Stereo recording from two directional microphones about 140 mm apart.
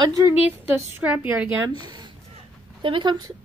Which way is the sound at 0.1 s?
20° right (ahead or behind).